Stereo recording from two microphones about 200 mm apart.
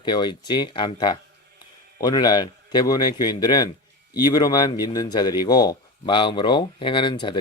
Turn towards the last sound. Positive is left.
turn(degrees=25)  # may be behind; listen again after turning